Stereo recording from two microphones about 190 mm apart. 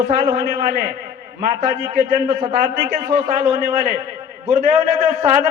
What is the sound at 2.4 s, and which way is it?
Speech, 45° right (ahead or behind).